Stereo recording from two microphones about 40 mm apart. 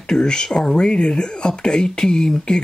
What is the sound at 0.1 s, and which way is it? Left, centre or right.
Speech, centre.